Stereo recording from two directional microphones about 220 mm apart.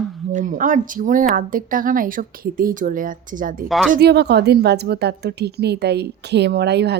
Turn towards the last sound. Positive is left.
turn(degrees=-50)  # may be behind; listen again after turning